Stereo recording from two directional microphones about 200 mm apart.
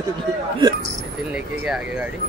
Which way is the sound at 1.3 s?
5° right (ahead or behind).